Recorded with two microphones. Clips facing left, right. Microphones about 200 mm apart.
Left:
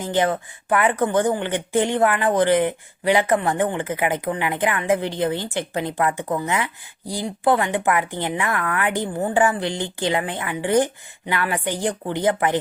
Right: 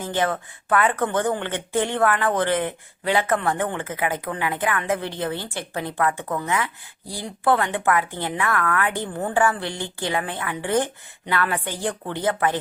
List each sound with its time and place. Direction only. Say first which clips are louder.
0.0 s speech: left 3 dB; 15° left (ahead or behind)